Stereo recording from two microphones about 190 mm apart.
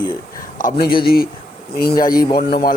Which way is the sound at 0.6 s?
55° left (ahead or behind).